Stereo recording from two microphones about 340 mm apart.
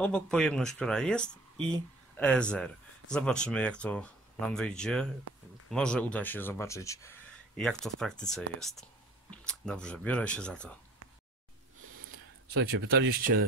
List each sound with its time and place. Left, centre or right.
0.0 s speech: centre
12.5 s speech: right